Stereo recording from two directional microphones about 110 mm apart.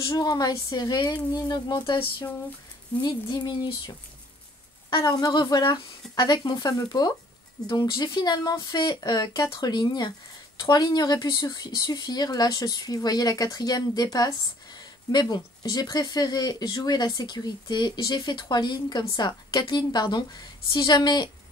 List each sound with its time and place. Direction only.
0.1 s speech: 35° left (ahead or behind)